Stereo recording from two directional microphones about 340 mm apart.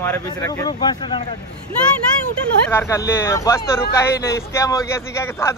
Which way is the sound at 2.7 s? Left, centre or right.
Centre.